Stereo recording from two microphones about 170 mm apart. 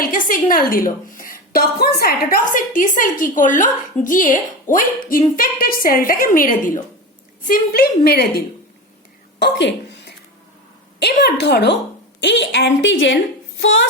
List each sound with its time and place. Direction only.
0.0 s a woman's voice: 55° left (ahead or behind)
9.4 s a sound: 90° left
11.0 s a woman's voice: 80° left